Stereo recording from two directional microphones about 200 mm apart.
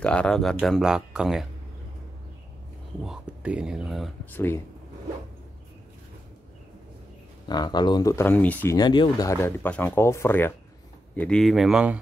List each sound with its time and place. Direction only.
0.0 s speech: 5° left (ahead or behind)
3.0 s speech: 5° right (ahead or behind)
7.4 s speech: 20° left (ahead or behind)
8.7 s speech: 20° left (ahead or behind); by 12.0 s 5° right (ahead or behind)